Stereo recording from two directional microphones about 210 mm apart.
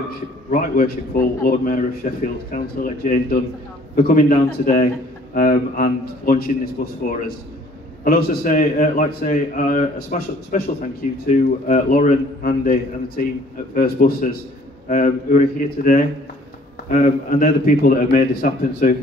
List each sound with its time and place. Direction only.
0.5 s a man's voice: 40° left (ahead or behind)